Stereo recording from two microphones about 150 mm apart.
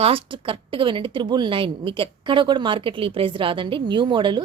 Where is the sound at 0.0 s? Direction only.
35° right (ahead or behind).